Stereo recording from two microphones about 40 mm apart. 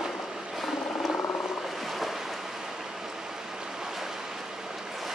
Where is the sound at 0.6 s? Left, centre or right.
Centre.